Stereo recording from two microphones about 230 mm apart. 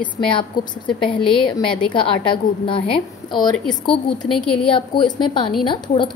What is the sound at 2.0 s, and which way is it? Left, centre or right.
Speech, left.